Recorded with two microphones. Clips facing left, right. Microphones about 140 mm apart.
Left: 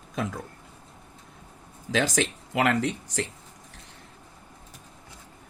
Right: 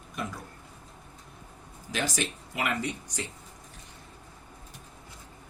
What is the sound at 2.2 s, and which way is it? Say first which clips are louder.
Speech: left 7 dB; 90° left.